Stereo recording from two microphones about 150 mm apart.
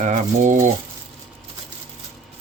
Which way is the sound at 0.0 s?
55° right (ahead or behind).